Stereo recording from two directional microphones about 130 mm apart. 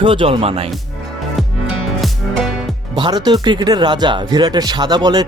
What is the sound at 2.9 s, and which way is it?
Speech, 35° right (ahead or behind).